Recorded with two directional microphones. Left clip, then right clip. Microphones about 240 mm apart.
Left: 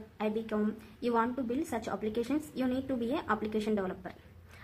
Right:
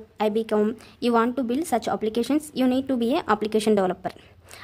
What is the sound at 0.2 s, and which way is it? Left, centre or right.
A woman's voice, right.